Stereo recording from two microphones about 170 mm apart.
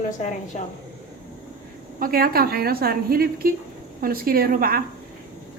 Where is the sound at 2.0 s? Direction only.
60° right (ahead or behind).